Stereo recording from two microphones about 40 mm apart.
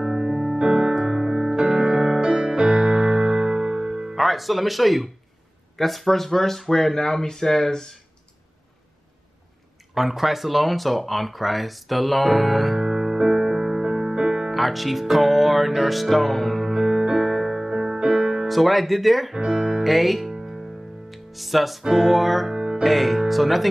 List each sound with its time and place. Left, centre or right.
0.0 s music: centre
4.2 s speech: centre
9.9 s speech: centre
14.5 s music: centre
17.0 s music: centre
18.5 s speech: centre
19.3 s music: centre
19.8 s music: centre
22.8 s speech: centre